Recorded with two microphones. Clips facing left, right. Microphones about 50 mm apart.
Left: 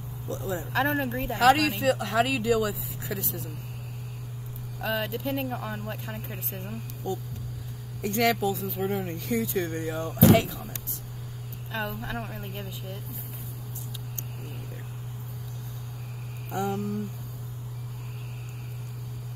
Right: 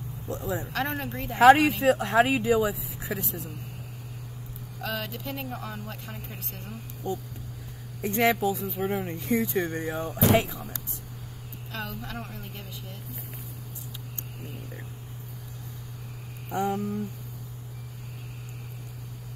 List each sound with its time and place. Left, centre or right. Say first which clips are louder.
0.3 s speech: right 1 dB; right
0.7 s speech: left 4 dB; centre
1.3 s speech: right 5 dB; right
4.8 s speech: left 4 dB; centre
7.0 s speech: right 1 dB; right; by 9.2 s centre
9.3 s speech: right 2 dB; right
11.7 s speech: left 4 dB; centre
16.5 s speech: right 1 dB; right